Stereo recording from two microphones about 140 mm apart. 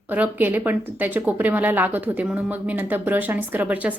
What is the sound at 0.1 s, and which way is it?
A woman's voice, 15° right (ahead or behind).